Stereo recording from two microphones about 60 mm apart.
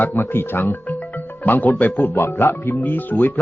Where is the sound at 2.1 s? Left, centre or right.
Left.